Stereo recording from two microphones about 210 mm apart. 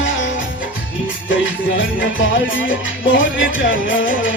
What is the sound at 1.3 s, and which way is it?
Music, 65° left (ahead or behind).